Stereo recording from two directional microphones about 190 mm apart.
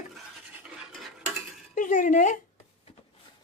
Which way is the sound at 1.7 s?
45° left (ahead or behind).